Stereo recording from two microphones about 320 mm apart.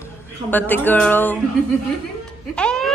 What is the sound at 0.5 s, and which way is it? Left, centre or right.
Speech, centre.